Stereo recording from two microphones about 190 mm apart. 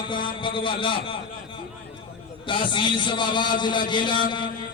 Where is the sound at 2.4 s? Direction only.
25° left (ahead or behind).